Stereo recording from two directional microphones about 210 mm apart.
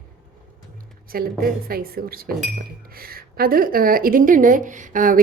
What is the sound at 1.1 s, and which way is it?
Speech, 45° right (ahead or behind).